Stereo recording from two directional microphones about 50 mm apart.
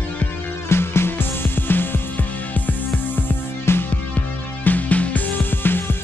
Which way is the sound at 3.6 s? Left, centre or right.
Left.